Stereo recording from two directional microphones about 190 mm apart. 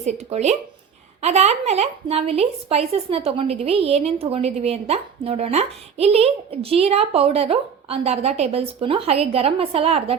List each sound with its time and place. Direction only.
0.0 s a woman's voice: 35° right (ahead or behind)